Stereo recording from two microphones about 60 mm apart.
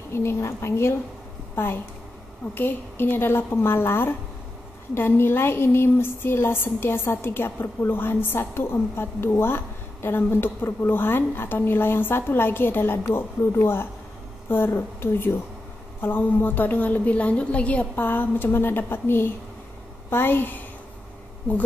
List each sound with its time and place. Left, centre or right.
0.1 s a woman's voice: left